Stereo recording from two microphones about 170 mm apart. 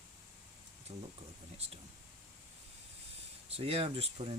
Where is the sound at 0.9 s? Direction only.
35° right (ahead or behind).